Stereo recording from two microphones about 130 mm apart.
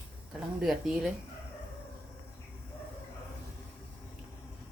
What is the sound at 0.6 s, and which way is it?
Speech, 5° right (ahead or behind).